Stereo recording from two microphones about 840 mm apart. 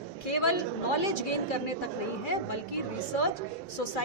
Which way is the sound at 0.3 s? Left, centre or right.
Left.